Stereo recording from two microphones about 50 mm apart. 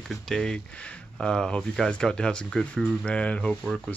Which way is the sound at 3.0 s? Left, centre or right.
Left.